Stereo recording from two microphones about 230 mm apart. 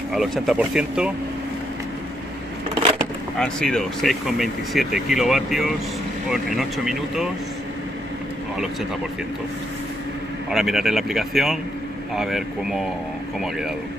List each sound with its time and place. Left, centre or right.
0.1 s speech: centre
2.7 s a sound: right
3.3 s speech: centre
10.5 s speech: centre